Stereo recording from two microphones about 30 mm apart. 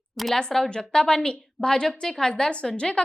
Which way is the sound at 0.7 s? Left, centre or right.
Left.